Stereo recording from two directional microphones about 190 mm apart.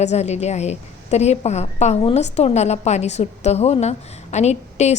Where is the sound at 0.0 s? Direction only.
35° left (ahead or behind).